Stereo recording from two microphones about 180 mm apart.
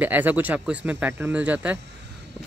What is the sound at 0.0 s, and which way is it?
Speech, 10° right (ahead or behind).